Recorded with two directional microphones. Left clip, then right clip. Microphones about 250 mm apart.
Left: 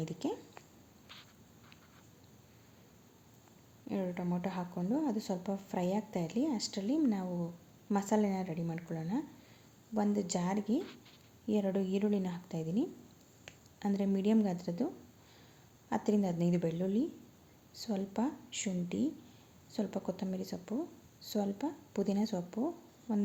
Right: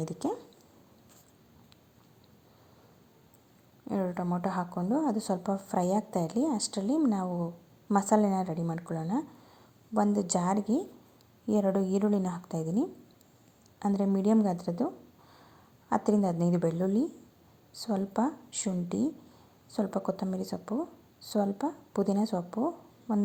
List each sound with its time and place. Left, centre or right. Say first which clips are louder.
0.0 s a woman's voice: right 5 dB; centre
3.8 s a woman's voice: right 6 dB; centre
13.9 s a woman's voice: right 5 dB; centre
15.9 s a woman's voice: right 6 dB; centre
22.5 s a sound: right 6 dB; centre